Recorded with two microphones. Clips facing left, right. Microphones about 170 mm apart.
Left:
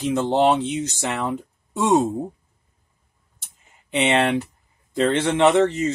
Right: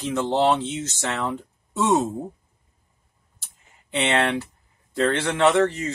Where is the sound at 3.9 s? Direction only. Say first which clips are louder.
Left 3 dB; 20° left (ahead or behind).